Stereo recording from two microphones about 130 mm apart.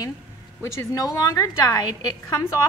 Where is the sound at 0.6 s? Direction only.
20° left (ahead or behind).